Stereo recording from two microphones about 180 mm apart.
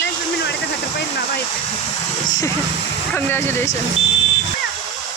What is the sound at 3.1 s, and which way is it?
Speech, 10° left (ahead or behind).